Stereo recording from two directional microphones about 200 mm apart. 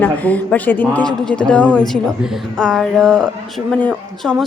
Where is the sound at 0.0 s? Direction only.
10° left (ahead or behind).